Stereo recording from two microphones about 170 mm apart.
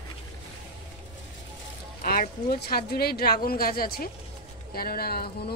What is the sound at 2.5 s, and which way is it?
Speech, 65° left (ahead or behind).